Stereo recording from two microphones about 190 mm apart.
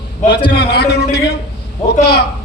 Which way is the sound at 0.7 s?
55° left (ahead or behind).